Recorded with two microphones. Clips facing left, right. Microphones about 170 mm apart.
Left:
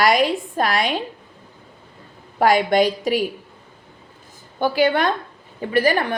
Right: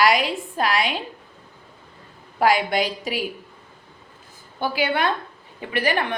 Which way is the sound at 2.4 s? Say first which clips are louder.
Left 4 dB; 45° left (ahead or behind).